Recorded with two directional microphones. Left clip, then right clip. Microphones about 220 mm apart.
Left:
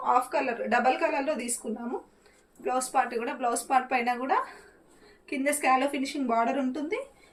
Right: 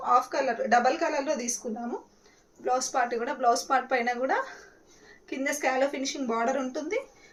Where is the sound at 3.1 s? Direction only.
15° right (ahead or behind).